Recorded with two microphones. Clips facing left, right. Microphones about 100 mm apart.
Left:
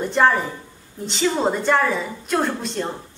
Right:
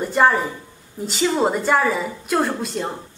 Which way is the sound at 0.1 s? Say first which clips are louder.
Right 1 dB; 5° right (ahead or behind).